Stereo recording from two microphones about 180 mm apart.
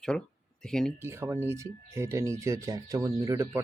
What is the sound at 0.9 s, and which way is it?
Speech, 15° right (ahead or behind).